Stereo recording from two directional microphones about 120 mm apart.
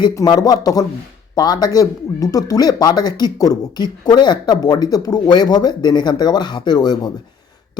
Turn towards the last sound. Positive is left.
turn(degrees=35)  # may be behind; listen again after turning